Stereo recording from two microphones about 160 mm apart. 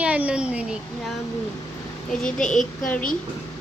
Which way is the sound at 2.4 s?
55° left (ahead or behind).